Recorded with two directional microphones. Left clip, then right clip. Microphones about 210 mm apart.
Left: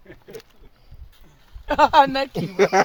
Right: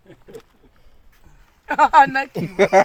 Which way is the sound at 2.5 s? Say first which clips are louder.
Right 3 dB; 55° right (ahead or behind).